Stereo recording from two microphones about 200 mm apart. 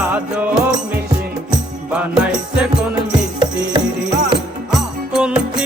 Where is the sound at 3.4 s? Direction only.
20° right (ahead or behind).